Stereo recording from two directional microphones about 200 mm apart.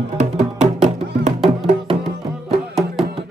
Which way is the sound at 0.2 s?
35° right (ahead or behind).